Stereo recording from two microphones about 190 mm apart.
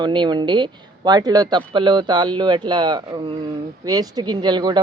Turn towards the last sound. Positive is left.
turn(degrees=-20)  # may be behind; listen again after turning